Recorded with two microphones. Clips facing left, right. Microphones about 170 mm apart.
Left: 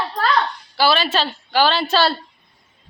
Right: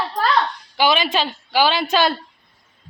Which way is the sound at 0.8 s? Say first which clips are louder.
Even; 15° right (ahead or behind).